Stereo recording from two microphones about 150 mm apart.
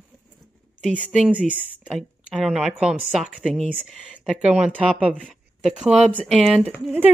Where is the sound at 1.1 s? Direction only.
5° right (ahead or behind).